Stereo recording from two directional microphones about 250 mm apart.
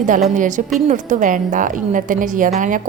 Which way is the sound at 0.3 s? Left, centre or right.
Right.